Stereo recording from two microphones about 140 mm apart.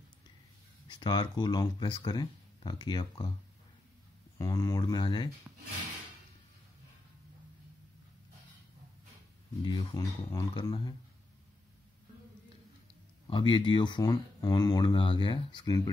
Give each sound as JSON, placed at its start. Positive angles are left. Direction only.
{"t": 0.8, "sound": "speech", "side_deg": 35}
{"t": 4.4, "sound": "speech", "side_deg": 20}
{"t": 9.6, "sound": "speech", "side_deg": 35}
{"t": 13.3, "sound": "speech", "side_deg": 35}